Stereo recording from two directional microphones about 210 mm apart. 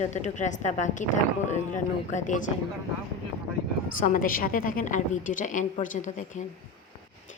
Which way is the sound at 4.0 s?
40° left (ahead or behind).